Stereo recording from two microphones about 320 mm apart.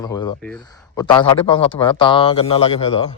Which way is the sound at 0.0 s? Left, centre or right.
Centre.